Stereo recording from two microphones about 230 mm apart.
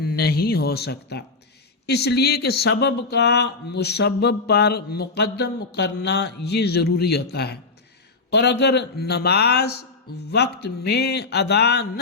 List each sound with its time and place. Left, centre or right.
0.0 s speech: left